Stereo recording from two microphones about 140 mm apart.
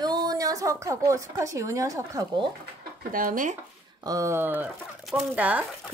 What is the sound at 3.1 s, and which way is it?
Speech, 75° right (ahead or behind).